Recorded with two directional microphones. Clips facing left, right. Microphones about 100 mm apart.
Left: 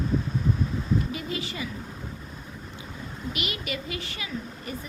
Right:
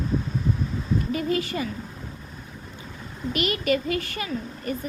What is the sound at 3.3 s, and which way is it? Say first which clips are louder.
Speech: right 11 dB; 45° right (ahead or behind).